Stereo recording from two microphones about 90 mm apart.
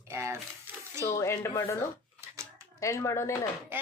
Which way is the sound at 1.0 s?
35° left (ahead or behind).